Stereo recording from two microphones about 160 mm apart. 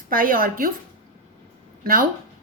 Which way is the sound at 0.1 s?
60° right (ahead or behind).